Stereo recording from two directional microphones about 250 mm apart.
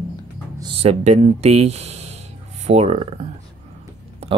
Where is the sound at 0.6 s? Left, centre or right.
Right.